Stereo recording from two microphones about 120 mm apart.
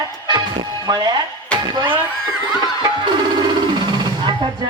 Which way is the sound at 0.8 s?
35° right (ahead or behind).